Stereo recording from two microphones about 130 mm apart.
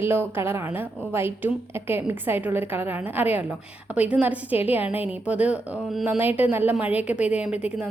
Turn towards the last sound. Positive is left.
turn(degrees=-10)  # may be behind; listen again after turning